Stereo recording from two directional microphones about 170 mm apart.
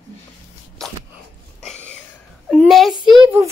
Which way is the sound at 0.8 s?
5° left (ahead or behind).